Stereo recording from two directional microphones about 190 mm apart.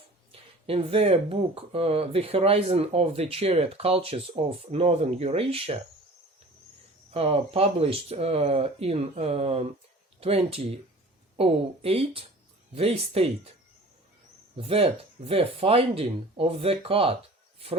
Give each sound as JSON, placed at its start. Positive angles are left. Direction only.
{"t": 0.7, "sound": "speech", "side_deg": -30}
{"t": 7.1, "sound": "speech", "side_deg": -30}
{"t": 14.5, "sound": "speech", "side_deg": -30}